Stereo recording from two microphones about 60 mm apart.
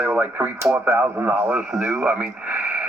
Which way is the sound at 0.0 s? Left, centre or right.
Right.